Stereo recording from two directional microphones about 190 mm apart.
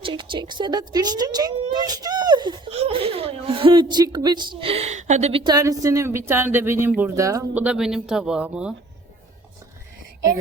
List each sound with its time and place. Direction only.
0.0 s speech: 25° right (ahead or behind); by 8.7 s 5° right (ahead or behind)